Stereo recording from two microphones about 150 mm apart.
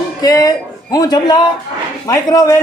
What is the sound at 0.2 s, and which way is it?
A man's voice, 25° left (ahead or behind).